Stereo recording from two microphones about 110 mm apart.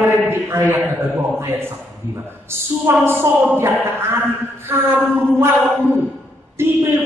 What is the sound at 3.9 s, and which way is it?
Speech, 20° right (ahead or behind).